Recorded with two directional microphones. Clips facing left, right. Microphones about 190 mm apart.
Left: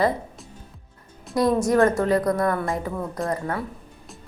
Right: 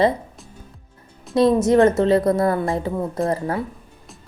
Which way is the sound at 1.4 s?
25° right (ahead or behind).